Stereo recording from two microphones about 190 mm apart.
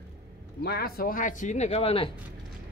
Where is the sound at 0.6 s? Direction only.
55° left (ahead or behind); by 2.1 s 30° left (ahead or behind).